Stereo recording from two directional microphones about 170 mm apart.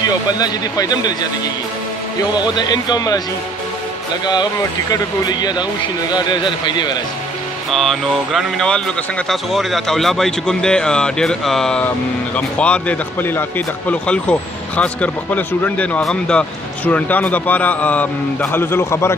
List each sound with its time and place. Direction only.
0.3 s speech: 20° left (ahead or behind)
2.3 s speech: 25° left (ahead or behind)
4.9 s speech: 25° left (ahead or behind)
7.7 s speech: centre (ahead or behind)